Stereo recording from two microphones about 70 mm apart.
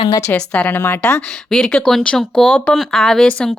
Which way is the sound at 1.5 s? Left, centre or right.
Centre.